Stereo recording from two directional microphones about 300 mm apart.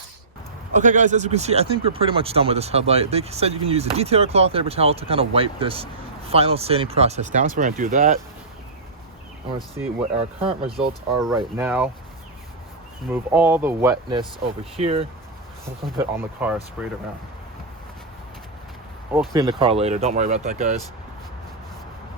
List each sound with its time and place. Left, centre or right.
0.7 s speech: right
10.4 s speech: centre
13.1 s speech: centre
16.0 s speech: centre
19.1 s speech: centre